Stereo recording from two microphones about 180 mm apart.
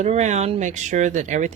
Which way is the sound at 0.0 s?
40° right (ahead or behind).